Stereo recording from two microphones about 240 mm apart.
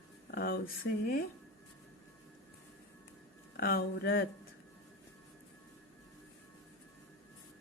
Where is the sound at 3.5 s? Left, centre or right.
Left.